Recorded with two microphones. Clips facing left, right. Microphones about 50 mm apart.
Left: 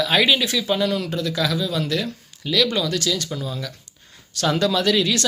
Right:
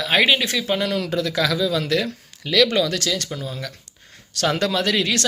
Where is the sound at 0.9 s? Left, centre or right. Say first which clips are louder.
Right 2 dB; right.